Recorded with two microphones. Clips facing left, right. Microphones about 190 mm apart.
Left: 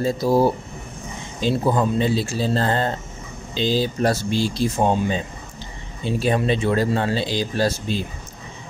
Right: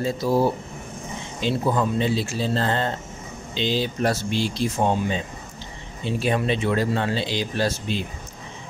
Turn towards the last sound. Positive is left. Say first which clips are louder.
# left 3 dB
turn(degrees=40)  # may be behind; listen again after turning